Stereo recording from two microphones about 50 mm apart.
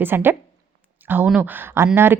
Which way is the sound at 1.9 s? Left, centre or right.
Right.